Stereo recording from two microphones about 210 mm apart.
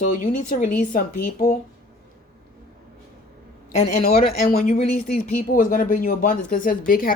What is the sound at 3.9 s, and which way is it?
A woman's voice, 40° left (ahead or behind).